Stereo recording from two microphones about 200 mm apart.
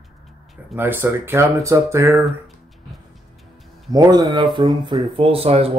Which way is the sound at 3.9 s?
20° right (ahead or behind).